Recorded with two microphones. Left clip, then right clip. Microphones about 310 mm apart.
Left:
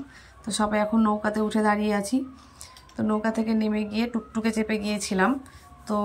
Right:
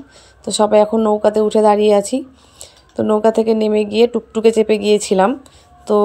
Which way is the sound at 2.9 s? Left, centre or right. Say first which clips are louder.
Right 12 dB; right.